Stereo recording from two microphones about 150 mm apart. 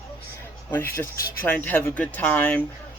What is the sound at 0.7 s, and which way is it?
Speech, 15° left (ahead or behind).